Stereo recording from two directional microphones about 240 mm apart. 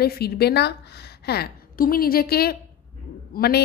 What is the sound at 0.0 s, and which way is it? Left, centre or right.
A woman's voice, left.